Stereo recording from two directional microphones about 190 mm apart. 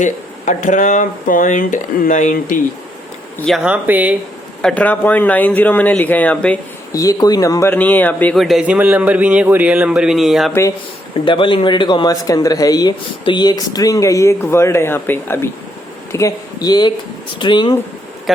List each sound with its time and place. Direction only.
0.0 s speech: 40° left (ahead or behind)
3.4 s speech: centre (ahead or behind)
4.6 s speech: 5° left (ahead or behind)
6.9 s speech: 20° left (ahead or behind); by 10.5 s centre (ahead or behind)
11.3 s speech: 25° left (ahead or behind)
18.3 s speech: centre (ahead or behind)